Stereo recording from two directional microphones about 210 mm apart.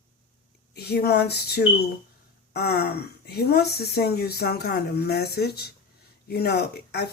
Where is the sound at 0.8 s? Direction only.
50° left (ahead or behind).